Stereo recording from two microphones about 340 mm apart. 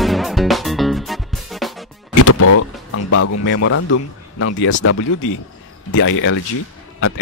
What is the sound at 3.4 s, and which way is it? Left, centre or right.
Speech, left.